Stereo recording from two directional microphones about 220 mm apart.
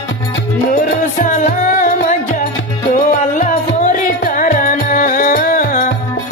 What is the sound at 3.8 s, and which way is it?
Music, 35° left (ahead or behind).